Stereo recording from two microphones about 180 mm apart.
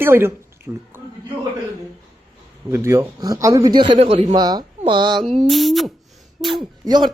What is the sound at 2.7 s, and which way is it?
A man's voice, 15° right (ahead or behind).